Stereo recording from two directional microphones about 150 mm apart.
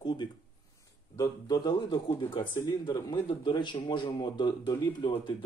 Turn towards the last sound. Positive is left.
turn(degrees=30)  # may be behind; listen again after turning